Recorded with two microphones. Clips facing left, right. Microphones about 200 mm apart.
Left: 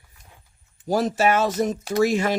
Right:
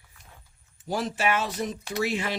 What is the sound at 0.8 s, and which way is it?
Speech, 40° left (ahead or behind).